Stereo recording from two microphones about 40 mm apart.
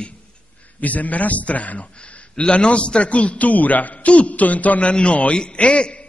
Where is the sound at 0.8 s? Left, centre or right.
Left.